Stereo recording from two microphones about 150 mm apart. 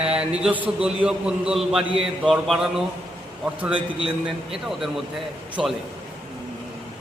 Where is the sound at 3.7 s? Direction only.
35° right (ahead or behind).